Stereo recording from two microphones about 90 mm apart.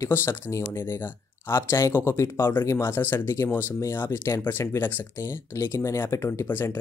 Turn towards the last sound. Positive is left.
turn(degrees=20)  # may be behind; listen again after turning